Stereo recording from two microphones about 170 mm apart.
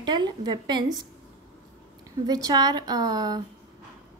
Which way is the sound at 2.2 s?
20° right (ahead or behind).